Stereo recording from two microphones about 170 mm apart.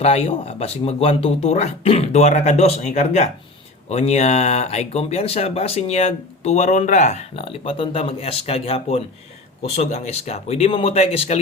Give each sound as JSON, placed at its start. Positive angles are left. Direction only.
{"t": 0.0, "sound": "speech", "side_deg": 35}